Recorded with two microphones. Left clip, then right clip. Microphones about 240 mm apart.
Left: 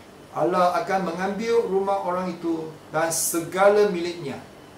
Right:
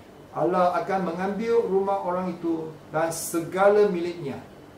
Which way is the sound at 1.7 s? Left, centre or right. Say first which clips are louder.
Left 1 dB; centre.